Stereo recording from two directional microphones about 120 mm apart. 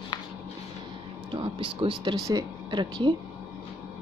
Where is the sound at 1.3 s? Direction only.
45° right (ahead or behind).